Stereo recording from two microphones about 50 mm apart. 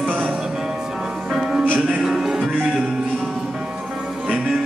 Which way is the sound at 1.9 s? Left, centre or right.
Centre.